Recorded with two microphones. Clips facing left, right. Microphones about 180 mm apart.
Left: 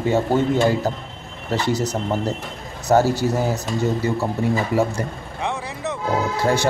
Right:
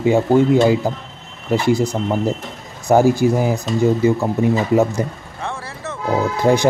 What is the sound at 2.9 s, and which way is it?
A man's voice, 15° right (ahead or behind).